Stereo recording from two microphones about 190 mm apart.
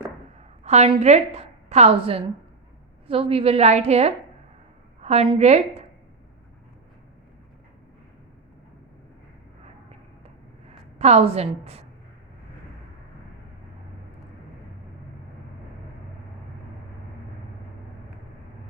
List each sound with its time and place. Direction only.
0.6 s a woman's voice: 35° right (ahead or behind)
10.9 s a woman's voice: 35° right (ahead or behind)